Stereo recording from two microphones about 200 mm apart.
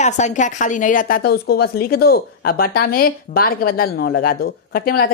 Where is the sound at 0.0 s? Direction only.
35° left (ahead or behind).